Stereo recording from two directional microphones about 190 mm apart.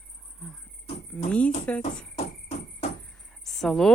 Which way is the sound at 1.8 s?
35° left (ahead or behind).